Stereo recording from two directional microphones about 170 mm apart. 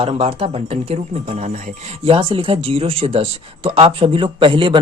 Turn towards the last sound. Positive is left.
turn(degrees=-30)  # may be behind; listen again after turning